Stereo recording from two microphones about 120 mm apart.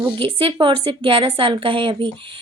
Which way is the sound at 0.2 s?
50° right (ahead or behind).